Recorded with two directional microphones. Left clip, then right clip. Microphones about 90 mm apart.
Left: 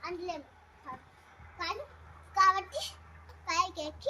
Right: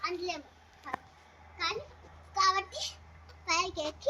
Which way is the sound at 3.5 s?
30° left (ahead or behind).